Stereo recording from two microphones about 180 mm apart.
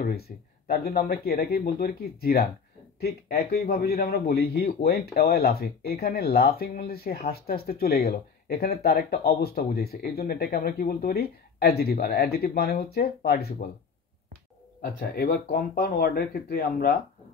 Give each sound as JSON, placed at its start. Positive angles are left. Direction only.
{"t": 0.0, "sound": "a man's voice", "side_deg": 60}
{"t": 15.0, "sound": "a man's voice", "side_deg": 60}